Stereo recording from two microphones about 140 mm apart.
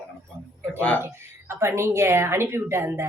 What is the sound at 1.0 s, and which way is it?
A woman's voice, 20° right (ahead or behind).